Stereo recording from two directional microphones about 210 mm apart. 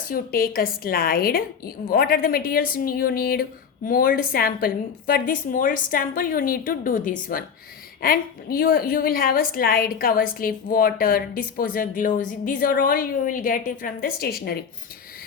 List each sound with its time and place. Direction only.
0.1 s a woman's voice: 45° left (ahead or behind)